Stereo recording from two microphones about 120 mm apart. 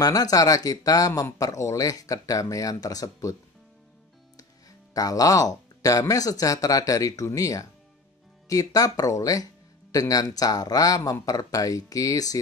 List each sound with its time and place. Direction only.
0.0 s speech: 30° left (ahead or behind)
4.4 s speech: 30° left (ahead or behind)